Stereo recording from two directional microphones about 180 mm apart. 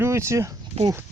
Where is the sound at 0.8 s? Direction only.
35° right (ahead or behind).